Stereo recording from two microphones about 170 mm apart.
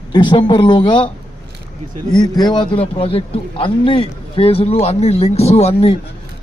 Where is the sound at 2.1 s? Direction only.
25° left (ahead or behind).